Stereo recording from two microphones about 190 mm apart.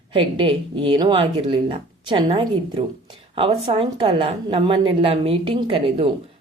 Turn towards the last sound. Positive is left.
turn(degrees=-30)  # may be behind; listen again after turning